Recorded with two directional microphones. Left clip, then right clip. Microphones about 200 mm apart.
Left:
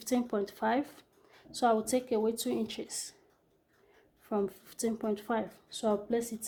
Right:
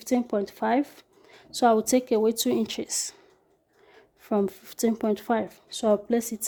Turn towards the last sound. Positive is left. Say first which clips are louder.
# right 6 dB
turn(degrees=-55)  # may be behind; listen again after turning